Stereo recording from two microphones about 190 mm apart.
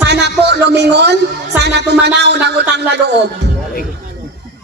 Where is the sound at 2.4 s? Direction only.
60° right (ahead or behind).